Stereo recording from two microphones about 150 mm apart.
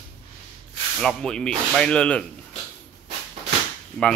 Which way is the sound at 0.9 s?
5° left (ahead or behind).